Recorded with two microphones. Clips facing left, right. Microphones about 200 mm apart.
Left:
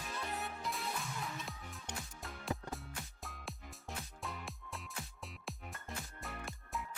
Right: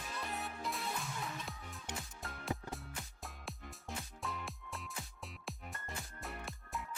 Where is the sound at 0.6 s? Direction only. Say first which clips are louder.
Even; centre (ahead or behind).